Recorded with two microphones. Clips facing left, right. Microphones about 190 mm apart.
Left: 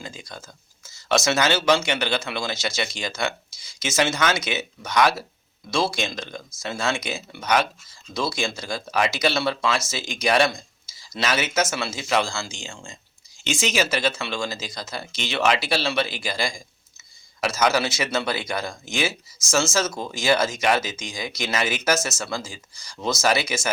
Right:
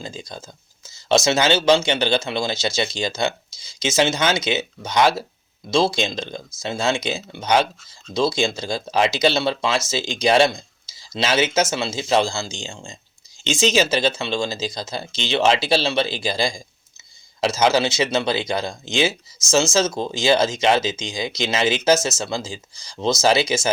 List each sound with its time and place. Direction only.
0.0 s speech: 25° right (ahead or behind)